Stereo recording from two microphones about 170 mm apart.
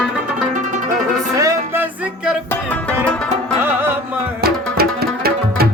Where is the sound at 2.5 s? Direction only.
10° left (ahead or behind).